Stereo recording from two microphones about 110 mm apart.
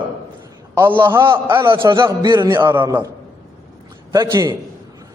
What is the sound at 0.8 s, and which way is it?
Speech, 20° right (ahead or behind).